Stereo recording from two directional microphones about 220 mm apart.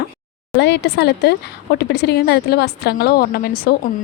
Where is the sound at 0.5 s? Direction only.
50° left (ahead or behind).